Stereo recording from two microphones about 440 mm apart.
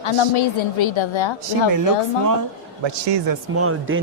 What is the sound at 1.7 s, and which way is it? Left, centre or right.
Speech, right.